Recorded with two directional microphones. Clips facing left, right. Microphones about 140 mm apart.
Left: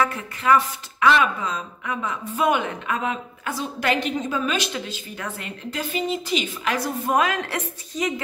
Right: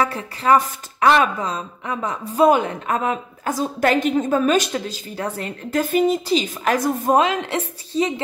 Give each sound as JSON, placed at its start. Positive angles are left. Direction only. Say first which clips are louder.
{"t": 0.0, "sound": "a woman's voice", "louder": "right 2 dB", "side_deg": -35}
{"t": 7.2, "sound": "a woman's voice", "louder": "right 4 dB", "side_deg": -25}